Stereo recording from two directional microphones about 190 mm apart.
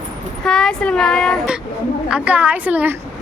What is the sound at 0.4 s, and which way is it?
A woman's voice, 5° left (ahead or behind).